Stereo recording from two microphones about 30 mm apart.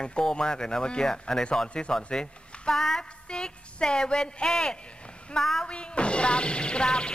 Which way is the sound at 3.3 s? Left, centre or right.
Left.